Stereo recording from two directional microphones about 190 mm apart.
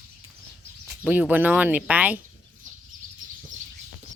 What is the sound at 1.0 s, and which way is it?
Speech, 5° right (ahead or behind).